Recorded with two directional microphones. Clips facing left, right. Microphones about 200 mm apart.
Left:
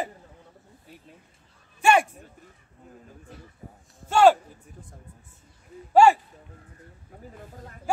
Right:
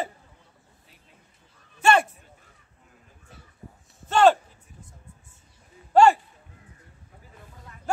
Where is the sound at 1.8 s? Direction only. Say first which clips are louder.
Even; 10° left (ahead or behind).